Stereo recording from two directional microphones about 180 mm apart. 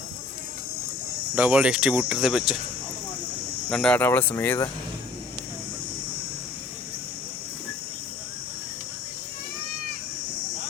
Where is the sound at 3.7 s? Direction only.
5° left (ahead or behind).